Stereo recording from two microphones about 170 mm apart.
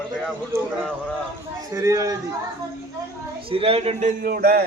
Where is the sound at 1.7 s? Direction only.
20° right (ahead or behind).